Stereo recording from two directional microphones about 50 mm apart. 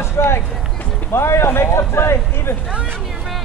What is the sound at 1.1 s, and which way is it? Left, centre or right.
Speech, left.